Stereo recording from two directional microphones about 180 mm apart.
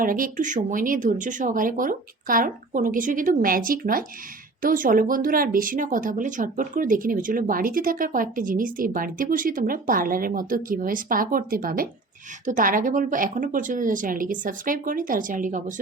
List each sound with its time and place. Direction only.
0.0 s speech: 50° right (ahead or behind)